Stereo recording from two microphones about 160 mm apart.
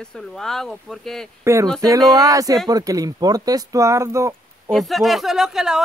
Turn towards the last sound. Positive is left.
turn(degrees=-5)  # may be behind; listen again after turning